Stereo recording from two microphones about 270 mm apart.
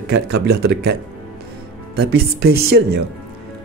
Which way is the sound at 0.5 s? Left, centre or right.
Right.